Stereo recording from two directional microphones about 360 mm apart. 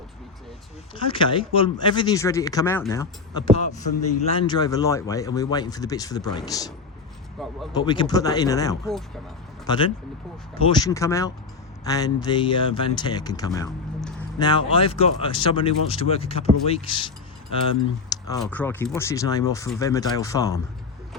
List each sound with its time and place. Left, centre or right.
0.9 s speech: centre
3.9 s speech: left
4.2 s speech: centre
7.8 s speech: centre